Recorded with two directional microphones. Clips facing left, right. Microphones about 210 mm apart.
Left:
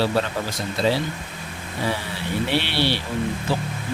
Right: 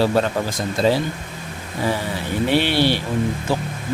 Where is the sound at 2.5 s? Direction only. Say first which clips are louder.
Right 6 dB; 45° right (ahead or behind).